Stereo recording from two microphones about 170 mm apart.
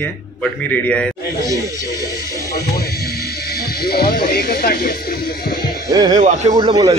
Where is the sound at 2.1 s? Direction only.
20° left (ahead or behind).